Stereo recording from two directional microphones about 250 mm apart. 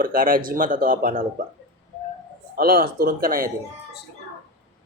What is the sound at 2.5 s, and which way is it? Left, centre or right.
Speech, right.